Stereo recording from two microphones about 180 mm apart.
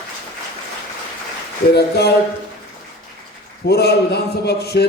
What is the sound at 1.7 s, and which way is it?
Speech, 65° left (ahead or behind).